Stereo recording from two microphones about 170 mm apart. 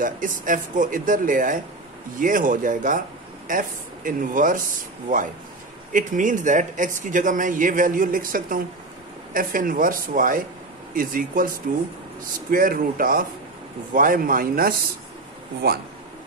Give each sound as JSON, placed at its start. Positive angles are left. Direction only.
{"t": 0.0, "sound": "speech", "side_deg": -50}
{"t": 5.9, "sound": "speech", "side_deg": -50}